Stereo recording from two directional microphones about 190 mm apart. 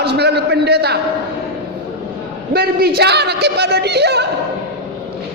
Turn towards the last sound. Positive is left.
turn(degrees=-60)  # may be behind; listen again after turning